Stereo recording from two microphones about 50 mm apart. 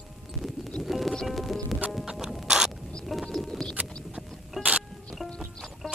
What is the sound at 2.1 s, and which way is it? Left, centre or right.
Rodents, centre.